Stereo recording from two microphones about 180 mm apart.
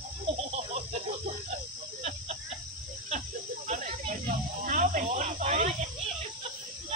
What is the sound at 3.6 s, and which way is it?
Snake, 45° right (ahead or behind).